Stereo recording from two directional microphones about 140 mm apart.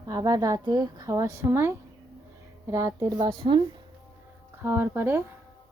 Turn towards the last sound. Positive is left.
turn(degrees=-15)  # may be behind; listen again after turning